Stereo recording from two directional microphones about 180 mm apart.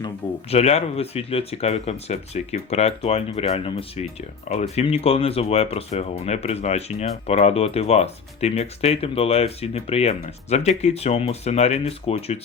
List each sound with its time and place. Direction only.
0.5 s speech: 35° left (ahead or behind)